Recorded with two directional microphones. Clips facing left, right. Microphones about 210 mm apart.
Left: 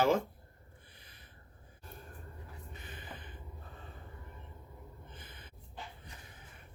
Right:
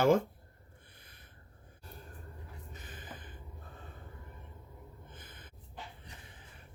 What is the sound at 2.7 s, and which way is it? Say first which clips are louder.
Gasp: even; 45° right (ahead or behind).